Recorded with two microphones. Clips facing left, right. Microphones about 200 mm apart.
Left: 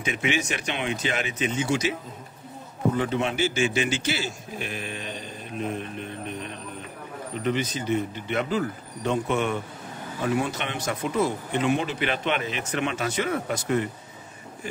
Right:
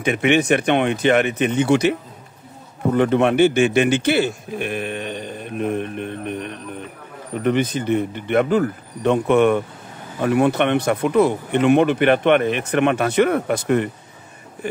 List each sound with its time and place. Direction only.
0.0 s speech: 60° right (ahead or behind)